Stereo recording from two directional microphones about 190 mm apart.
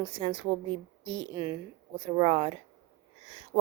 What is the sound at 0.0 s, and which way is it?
Speech, 25° right (ahead or behind).